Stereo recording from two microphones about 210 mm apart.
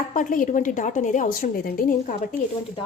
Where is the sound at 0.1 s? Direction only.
40° left (ahead or behind).